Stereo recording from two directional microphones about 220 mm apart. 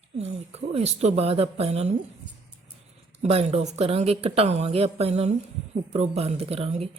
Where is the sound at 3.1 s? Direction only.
30° right (ahead or behind).